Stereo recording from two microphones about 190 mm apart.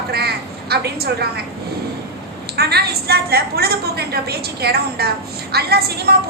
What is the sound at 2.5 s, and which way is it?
A woman's voice, 55° right (ahead or behind).